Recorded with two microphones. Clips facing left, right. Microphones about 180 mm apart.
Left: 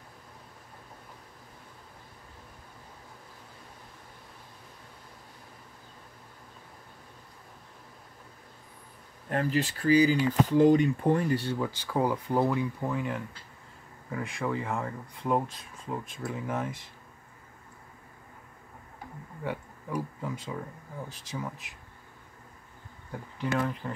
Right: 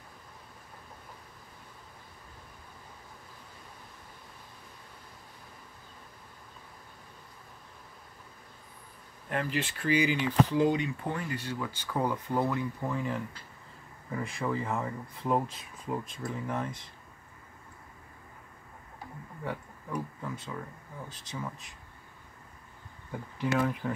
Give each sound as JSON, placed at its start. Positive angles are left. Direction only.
{"t": 9.3, "sound": "speech", "side_deg": 40}
{"t": 11.9, "sound": "speech", "side_deg": 10}
{"t": 12.8, "sound": "speech", "side_deg": 5}
{"t": 19.4, "sound": "a sound", "side_deg": 0}
{"t": 20.2, "sound": "speech", "side_deg": 15}
{"t": 23.4, "sound": "speech", "side_deg": -5}